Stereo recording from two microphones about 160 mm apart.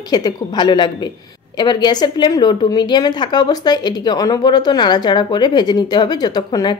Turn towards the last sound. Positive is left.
turn(degrees=25)  # may be behind; listen again after turning